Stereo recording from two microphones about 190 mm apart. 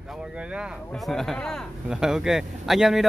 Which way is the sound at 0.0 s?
5° right (ahead or behind).